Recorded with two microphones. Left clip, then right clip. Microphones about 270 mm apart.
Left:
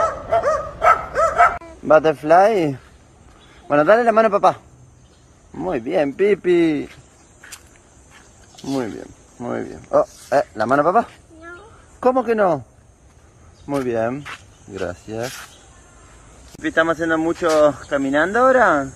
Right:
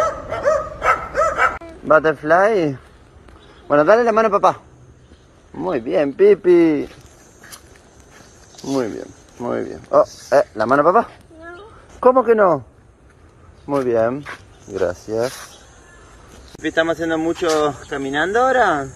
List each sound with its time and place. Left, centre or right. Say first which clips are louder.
0.3 s bow-wow: even; centre
3.6 s speech: right 1 dB; centre
8.6 s speech: right 3 dB; centre
13.7 s speech: right 4 dB; centre
16.6 s speech: left 1 dB; centre